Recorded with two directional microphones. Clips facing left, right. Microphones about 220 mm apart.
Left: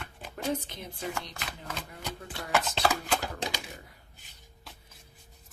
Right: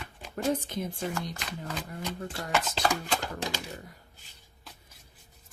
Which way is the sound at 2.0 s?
Centre (ahead or behind).